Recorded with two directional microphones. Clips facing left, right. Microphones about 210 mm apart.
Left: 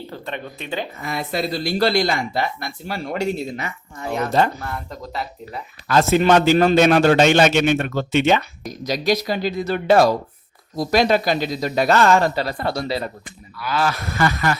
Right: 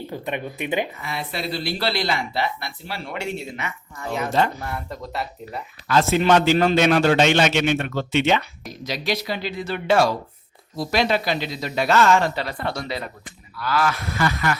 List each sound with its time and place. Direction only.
0.1 s speech: 15° right (ahead or behind)
1.0 s speech: 45° left (ahead or behind)
4.9 s speech: centre (ahead or behind)
5.9 s speech: 45° left (ahead or behind)
14.2 s speech: 45° left (ahead or behind)